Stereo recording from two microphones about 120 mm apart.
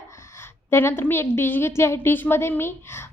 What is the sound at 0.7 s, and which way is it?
A woman's voice, 20° left (ahead or behind).